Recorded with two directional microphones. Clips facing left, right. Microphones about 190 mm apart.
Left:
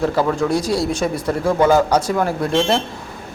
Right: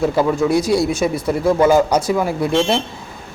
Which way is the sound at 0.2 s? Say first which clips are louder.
Right 2 dB; 10° right (ahead or behind).